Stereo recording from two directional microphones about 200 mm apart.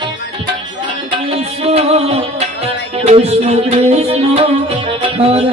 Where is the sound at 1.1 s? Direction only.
30° right (ahead or behind).